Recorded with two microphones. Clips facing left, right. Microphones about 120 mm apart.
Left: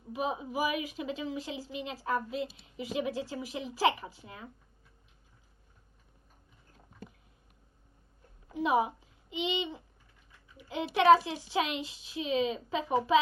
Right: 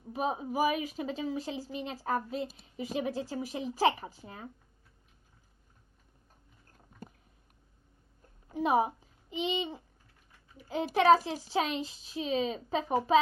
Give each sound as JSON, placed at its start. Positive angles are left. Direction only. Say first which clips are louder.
{"t": 0.1, "sound": "a woman's voice", "louder": "right 1 dB", "side_deg": -40}
{"t": 7.0, "sound": "a sound", "louder": "even", "side_deg": -45}
{"t": 8.5, "sound": "a child's voice", "louder": "right 1 dB", "side_deg": -40}